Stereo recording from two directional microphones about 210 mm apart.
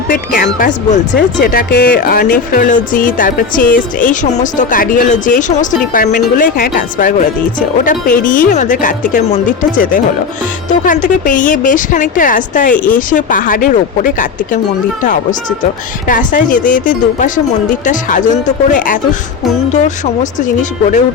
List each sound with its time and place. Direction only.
0.1 s speech: 40° left (ahead or behind)
20.4 s speech: 35° left (ahead or behind)